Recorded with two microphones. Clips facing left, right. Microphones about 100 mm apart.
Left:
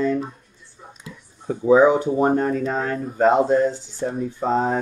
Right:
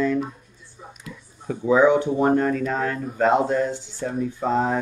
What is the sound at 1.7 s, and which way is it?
Speech, 40° left (ahead or behind).